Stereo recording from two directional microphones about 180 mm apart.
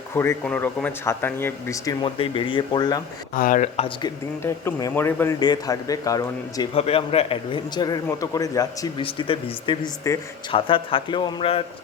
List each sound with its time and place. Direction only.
0.1 s speech: 15° left (ahead or behind)
3.3 s speech: 50° left (ahead or behind)
3.8 s a man's voice: 30° left (ahead or behind)
4.4 s a man's voice: 15° left (ahead or behind)
6.7 s a man's voice: 35° left (ahead or behind)
9.0 s a man's voice: 30° left (ahead or behind)